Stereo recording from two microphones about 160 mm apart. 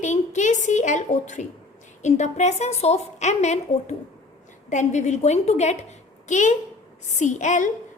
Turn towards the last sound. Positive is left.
turn(degrees=50)  # may be behind; listen again after turning